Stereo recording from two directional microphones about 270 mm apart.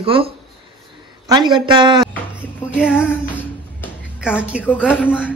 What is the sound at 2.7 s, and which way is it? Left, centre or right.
A woman's voice, centre.